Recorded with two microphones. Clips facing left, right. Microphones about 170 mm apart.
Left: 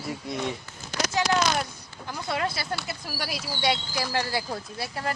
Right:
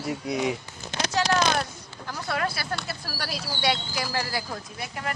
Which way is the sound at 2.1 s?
20° left (ahead or behind).